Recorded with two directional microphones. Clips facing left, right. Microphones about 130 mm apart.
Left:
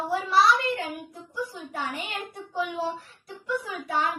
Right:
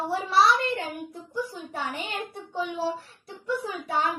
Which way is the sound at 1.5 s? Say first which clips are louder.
Even; 30° right (ahead or behind).